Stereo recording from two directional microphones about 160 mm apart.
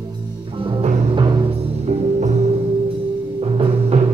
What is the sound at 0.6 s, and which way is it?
Music, 35° right (ahead or behind).